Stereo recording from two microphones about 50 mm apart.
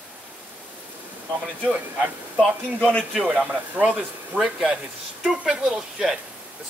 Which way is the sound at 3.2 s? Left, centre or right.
Right.